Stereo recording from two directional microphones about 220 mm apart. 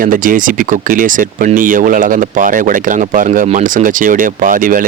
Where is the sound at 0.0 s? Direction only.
40° right (ahead or behind).